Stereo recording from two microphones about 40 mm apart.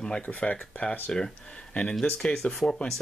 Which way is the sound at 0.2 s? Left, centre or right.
Left.